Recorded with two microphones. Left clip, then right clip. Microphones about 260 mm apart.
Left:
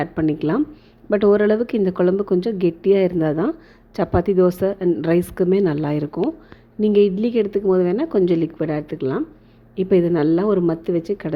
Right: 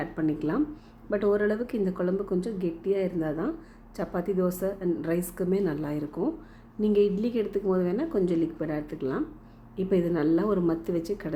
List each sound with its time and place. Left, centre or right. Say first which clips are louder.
0.0 s a woman's voice: left 8 dB; left